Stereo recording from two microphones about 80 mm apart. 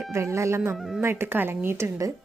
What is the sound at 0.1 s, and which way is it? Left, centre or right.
Speech, right.